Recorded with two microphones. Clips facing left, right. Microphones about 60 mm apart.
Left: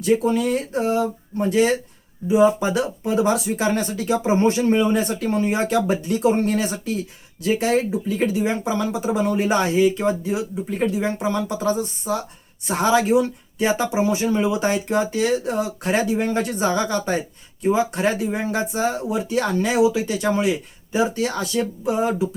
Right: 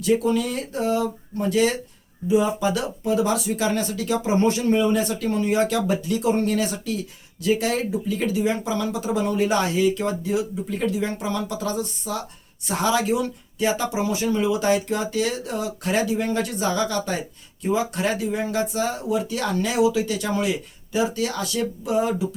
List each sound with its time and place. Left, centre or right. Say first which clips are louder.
0.0 s speech: left 2 dB; left